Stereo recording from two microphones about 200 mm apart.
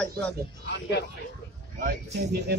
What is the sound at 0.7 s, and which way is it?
Speech, 60° left (ahead or behind).